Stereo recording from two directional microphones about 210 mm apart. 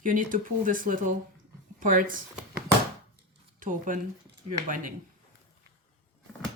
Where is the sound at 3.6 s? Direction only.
40° right (ahead or behind).